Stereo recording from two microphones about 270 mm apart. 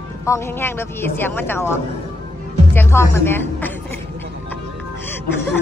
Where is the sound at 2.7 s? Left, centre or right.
Centre.